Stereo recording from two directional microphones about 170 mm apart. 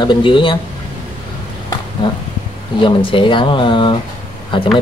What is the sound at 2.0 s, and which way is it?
Speech, 30° left (ahead or behind).